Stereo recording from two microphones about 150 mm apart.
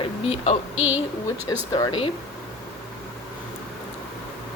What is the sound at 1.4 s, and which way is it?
Speech, 25° left (ahead or behind).